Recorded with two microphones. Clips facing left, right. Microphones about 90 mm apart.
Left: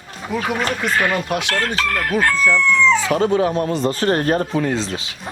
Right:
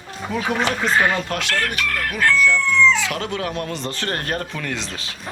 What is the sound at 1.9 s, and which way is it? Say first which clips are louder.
Chicken: even; 35° left (ahead or behind).